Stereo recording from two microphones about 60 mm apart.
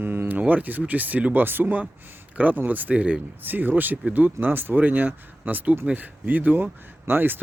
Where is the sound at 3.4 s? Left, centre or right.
Right.